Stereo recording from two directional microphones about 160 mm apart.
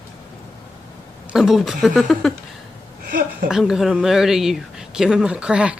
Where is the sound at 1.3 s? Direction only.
Centre (ahead or behind).